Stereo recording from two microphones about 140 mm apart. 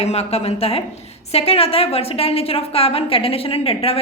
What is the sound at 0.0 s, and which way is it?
A woman's voice, 50° left (ahead or behind).